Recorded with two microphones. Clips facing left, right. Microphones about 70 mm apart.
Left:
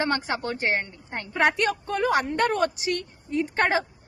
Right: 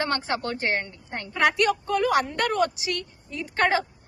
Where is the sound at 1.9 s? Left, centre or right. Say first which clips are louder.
Right 1 dB; left.